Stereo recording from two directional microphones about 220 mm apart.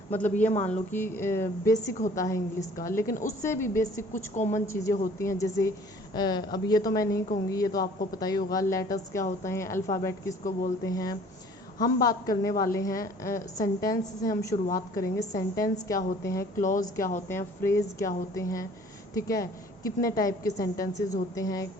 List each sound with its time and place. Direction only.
0.1 s a woman's voice: 10° left (ahead or behind)
4.4 s a woman's voice: 35° left (ahead or behind)
4.7 s a woman's voice: 15° left (ahead or behind)
14.5 s a woman's voice: 40° left (ahead or behind)
14.9 s a woman's voice: 15° left (ahead or behind)
16.6 s a woman's voice: 35° left (ahead or behind)
17.2 s a woman's voice: 10° left (ahead or behind)